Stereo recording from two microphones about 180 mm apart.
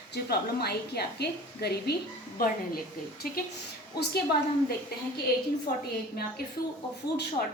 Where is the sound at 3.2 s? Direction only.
55° left (ahead or behind).